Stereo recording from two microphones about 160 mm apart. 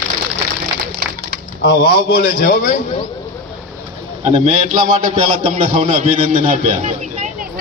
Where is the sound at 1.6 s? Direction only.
70° left (ahead or behind).